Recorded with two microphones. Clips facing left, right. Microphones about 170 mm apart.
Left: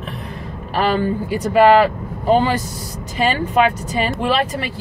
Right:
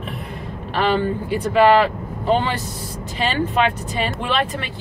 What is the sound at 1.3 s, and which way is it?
Speech, 40° left (ahead or behind).